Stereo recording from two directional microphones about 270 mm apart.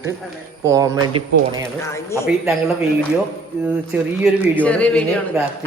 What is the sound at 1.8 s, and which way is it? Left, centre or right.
Speech, centre.